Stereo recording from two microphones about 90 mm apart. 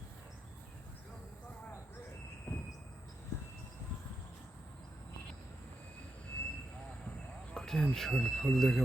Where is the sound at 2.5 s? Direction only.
25° left (ahead or behind).